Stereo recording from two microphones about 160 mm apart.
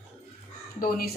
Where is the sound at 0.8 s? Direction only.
70° left (ahead or behind).